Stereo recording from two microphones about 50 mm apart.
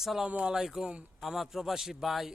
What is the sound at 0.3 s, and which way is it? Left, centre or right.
Speech, right.